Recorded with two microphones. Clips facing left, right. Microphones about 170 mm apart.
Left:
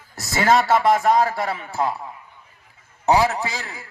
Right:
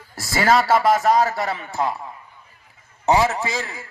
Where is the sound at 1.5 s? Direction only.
5° left (ahead or behind).